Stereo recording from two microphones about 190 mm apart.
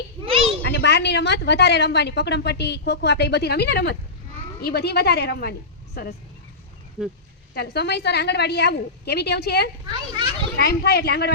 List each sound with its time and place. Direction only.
0.3 s a sound: 30° right (ahead or behind)
0.7 s a woman's voice: 65° left (ahead or behind)
7.0 s speech: 5° right (ahead or behind)
7.5 s a woman's voice: 55° left (ahead or behind)